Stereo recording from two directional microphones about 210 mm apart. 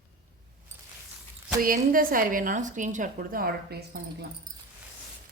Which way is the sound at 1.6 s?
40° right (ahead or behind).